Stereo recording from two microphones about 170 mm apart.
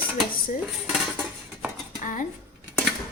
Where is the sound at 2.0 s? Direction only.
50° left (ahead or behind).